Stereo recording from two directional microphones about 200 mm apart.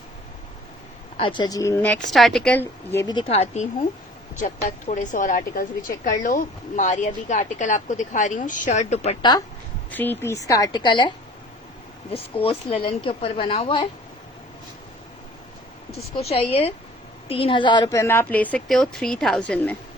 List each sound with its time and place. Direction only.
1.1 s a woman's voice: 25° left (ahead or behind)
9.9 s a woman's voice: 10° left (ahead or behind)
12.1 s speech: 30° left (ahead or behind)
16.1 s a woman's voice: 30° left (ahead or behind); by 19.7 s 5° left (ahead or behind)